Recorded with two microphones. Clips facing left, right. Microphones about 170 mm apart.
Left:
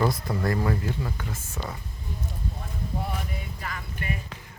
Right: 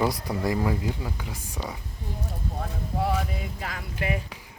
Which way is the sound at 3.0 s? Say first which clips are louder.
Right 9 dB; 90° right.